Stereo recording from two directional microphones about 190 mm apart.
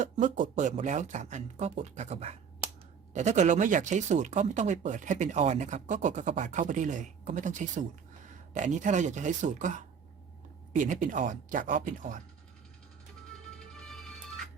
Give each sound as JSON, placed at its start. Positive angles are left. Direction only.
{"t": 0.0, "sound": "speech", "side_deg": -40}
{"t": 13.7, "sound": "music", "side_deg": 5}